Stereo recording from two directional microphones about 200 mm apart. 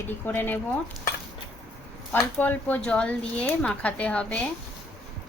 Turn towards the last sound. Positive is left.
turn(degrees=5)  # may be behind; listen again after turning